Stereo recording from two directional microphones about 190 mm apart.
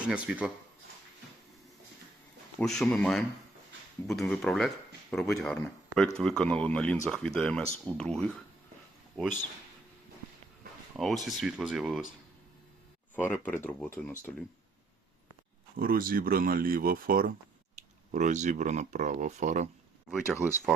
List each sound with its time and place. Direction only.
0.1 s speech: 5° right (ahead or behind)
2.6 s a man's voice: 5° left (ahead or behind)
10.9 s speech: centre (ahead or behind)
13.1 s speech: 10° left (ahead or behind)
15.7 s speech: 50° right (ahead or behind)
20.3 s speech: 10° right (ahead or behind)